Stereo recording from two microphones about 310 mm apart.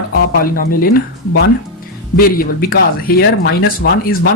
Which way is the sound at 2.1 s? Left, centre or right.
Left.